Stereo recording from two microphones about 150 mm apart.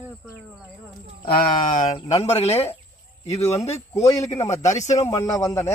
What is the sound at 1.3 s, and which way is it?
Speech, 70° left (ahead or behind).